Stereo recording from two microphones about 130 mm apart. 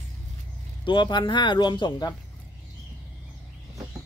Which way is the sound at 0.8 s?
35° left (ahead or behind).